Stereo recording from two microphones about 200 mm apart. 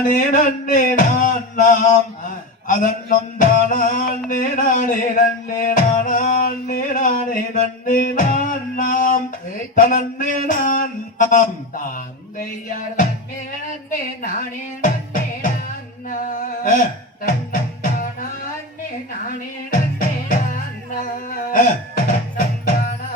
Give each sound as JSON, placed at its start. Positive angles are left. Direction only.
{"t": 0.1, "sound": "music", "side_deg": 40}
{"t": 9.7, "sound": "a sound", "side_deg": 40}
{"t": 14.2, "sound": "speech", "side_deg": 40}
{"t": 16.0, "sound": "music", "side_deg": 40}
{"t": 19.3, "sound": "music", "side_deg": 45}
{"t": 21.2, "sound": "a sound", "side_deg": 45}